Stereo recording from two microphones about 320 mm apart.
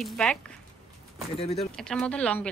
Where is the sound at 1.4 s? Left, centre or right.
Centre.